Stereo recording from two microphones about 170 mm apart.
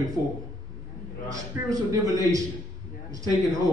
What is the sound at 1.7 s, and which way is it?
Speech, 20° right (ahead or behind).